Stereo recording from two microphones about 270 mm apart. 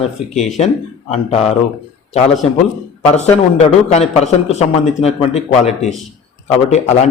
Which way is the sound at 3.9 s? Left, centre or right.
Left.